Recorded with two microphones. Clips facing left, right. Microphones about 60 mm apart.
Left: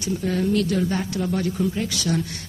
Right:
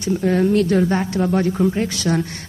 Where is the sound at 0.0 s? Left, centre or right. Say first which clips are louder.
Right 6 dB; right.